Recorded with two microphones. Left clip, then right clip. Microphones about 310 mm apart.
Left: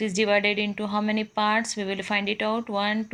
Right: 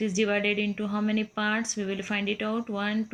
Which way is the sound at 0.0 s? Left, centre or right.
Centre.